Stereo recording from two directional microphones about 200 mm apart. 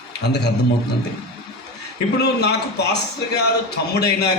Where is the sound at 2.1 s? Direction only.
55° left (ahead or behind).